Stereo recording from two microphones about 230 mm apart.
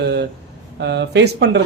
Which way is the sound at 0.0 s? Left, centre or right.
Right.